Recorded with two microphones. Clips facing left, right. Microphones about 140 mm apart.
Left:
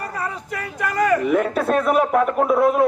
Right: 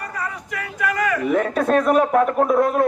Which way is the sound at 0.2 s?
30° left (ahead or behind).